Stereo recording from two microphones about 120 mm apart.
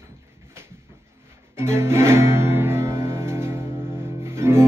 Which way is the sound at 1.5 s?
20° right (ahead or behind).